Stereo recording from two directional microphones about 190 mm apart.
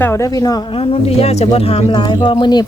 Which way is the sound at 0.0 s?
15° left (ahead or behind).